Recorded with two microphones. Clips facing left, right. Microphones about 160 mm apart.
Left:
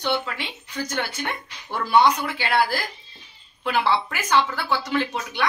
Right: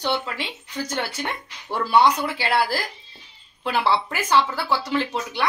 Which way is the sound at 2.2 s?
35° right (ahead or behind).